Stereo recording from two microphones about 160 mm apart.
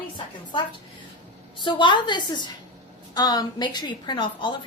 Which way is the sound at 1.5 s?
30° left (ahead or behind).